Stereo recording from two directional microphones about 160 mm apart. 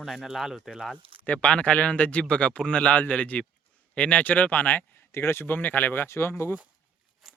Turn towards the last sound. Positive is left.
turn(degrees=15)  # may be behind; listen again after turning